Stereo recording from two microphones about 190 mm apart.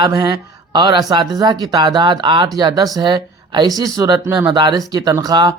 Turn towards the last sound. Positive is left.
turn(degrees=-20)  # may be behind; listen again after turning